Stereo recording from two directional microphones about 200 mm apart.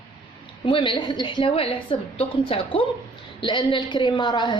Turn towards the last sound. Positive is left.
turn(degrees=20)  # may be behind; listen again after turning